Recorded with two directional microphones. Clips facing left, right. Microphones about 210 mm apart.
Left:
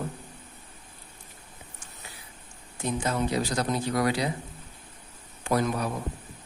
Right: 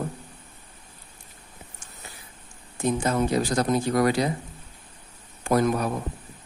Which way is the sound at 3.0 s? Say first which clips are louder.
Right 2 dB; 50° right (ahead or behind).